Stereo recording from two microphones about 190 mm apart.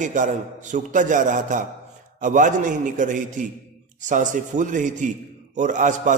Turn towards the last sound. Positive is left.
turn(degrees=-40)  # may be behind; listen again after turning